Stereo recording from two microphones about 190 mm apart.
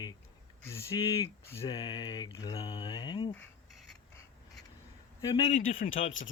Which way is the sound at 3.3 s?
10° left (ahead or behind).